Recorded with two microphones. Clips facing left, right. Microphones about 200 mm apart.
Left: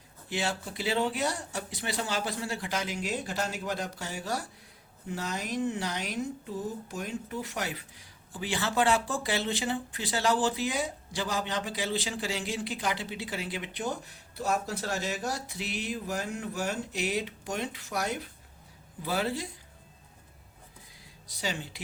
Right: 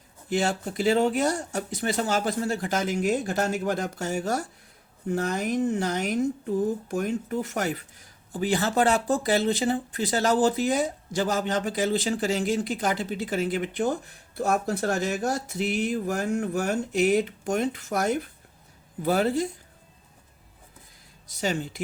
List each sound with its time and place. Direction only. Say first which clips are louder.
0.3 s speech: right 7 dB; 45° right (ahead or behind)
21.3 s speech: right 7 dB; 45° right (ahead or behind)